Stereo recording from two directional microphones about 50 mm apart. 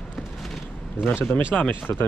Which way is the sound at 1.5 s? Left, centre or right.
Left.